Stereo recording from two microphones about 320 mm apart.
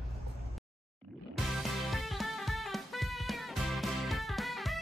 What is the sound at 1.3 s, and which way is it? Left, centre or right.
Music, centre.